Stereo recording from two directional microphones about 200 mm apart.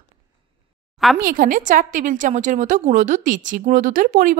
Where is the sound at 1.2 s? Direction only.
45° right (ahead or behind).